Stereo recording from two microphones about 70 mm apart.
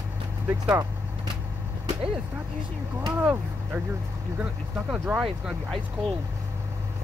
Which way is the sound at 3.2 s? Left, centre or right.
Right.